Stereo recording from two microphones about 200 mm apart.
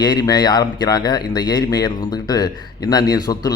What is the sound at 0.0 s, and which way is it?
A man's voice, 20° left (ahead or behind).